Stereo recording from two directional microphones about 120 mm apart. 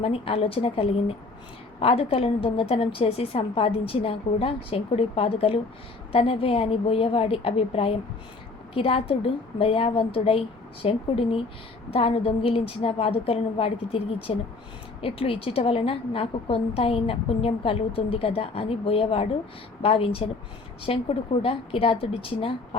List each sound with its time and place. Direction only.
0.0 s a woman's voice: 50° left (ahead or behind)